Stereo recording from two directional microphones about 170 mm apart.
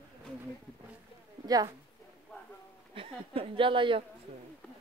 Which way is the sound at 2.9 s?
30° right (ahead or behind).